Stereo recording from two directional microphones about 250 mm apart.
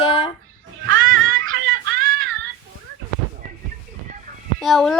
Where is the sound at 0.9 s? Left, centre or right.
Right.